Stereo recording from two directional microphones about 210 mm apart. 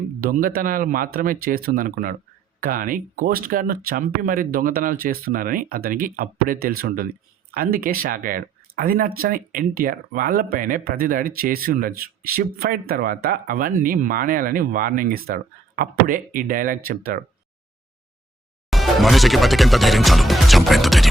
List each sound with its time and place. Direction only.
0.2 s speech: 40° right (ahead or behind)
18.7 s speech: centre (ahead or behind)